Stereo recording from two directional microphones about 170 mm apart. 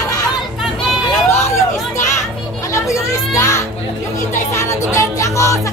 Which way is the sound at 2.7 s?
15° left (ahead or behind).